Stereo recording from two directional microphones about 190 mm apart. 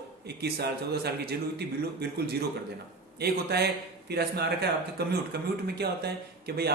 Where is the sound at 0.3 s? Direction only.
60° right (ahead or behind).